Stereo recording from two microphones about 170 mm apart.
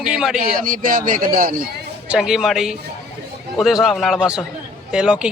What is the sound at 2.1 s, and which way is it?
Speech, 5° right (ahead or behind).